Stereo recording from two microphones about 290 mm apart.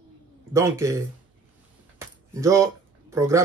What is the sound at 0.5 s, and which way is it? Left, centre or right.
Speech, centre.